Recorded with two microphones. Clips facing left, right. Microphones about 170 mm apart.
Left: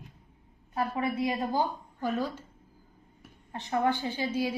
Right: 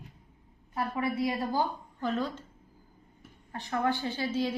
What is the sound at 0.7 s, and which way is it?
A woman's voice, 25° left (ahead or behind).